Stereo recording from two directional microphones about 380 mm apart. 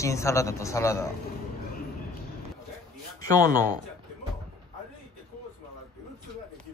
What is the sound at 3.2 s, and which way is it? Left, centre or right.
Speech, centre.